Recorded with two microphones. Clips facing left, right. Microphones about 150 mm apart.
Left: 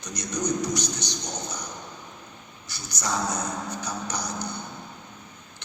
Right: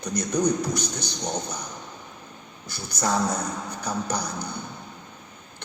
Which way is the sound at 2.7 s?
55° right (ahead or behind).